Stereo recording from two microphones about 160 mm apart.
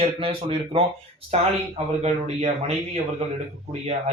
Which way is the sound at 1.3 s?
40° right (ahead or behind).